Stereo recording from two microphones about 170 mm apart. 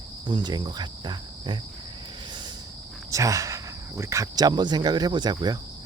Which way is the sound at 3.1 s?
20° right (ahead or behind).